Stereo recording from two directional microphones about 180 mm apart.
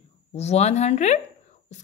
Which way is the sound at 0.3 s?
35° left (ahead or behind).